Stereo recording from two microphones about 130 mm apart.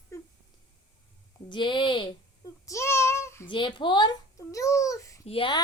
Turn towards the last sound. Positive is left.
turn(degrees=40)  # may be behind; listen again after turning